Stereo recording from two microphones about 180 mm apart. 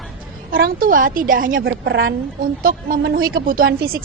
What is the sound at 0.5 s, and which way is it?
Speech, 55° right (ahead or behind).